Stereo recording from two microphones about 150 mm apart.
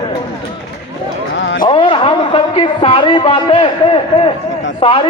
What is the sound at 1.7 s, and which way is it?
A man's voice, 35° left (ahead or behind).